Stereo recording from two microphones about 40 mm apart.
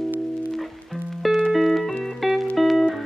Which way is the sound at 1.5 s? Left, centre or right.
Centre.